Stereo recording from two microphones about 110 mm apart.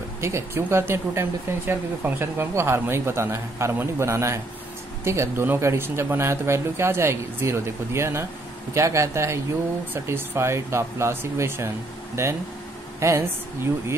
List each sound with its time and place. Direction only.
0.2 s speech: 25° right (ahead or behind)
13.0 s speech: 20° right (ahead or behind)